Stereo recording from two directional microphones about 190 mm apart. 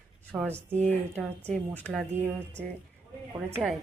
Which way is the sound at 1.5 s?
5° left (ahead or behind).